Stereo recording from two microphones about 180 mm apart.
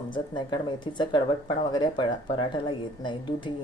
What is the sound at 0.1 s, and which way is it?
Speech, 25° left (ahead or behind).